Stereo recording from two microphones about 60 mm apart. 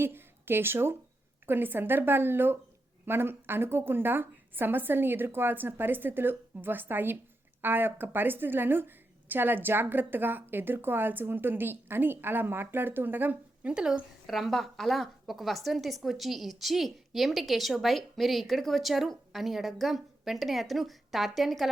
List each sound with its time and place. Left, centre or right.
0.0 s a woman's voice: right
13.7 s speech: centre
14.3 s a woman's voice: centre